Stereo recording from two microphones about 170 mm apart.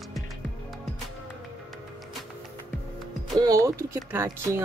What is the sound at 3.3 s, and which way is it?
Speech, 20° right (ahead or behind).